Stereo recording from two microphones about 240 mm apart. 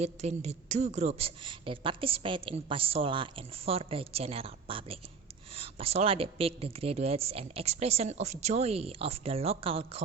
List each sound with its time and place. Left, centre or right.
0.0 s a woman's voice: right